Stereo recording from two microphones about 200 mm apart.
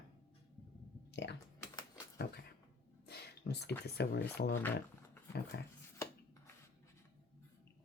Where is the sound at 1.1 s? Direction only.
60° left (ahead or behind).